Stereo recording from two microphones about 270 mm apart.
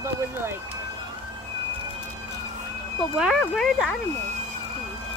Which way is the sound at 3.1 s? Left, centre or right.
Centre.